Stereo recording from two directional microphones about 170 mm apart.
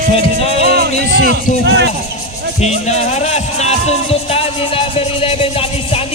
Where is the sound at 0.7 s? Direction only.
65° right (ahead or behind).